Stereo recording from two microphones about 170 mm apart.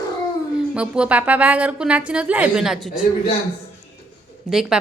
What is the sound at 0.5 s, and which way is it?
Speech, 5° right (ahead or behind).